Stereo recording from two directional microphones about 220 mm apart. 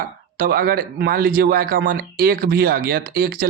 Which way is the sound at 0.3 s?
40° right (ahead or behind).